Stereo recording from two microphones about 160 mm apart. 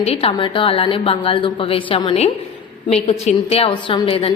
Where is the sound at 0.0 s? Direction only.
40° left (ahead or behind).